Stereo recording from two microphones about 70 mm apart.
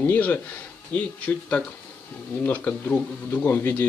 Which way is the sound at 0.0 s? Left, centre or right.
Left.